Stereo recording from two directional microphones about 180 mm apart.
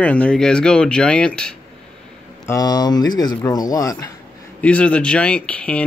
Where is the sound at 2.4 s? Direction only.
20° left (ahead or behind).